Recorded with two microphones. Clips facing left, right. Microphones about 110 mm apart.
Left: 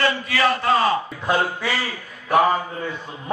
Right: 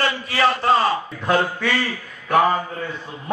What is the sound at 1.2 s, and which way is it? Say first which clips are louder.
Speech: right 4 dB; 10° left (ahead or behind).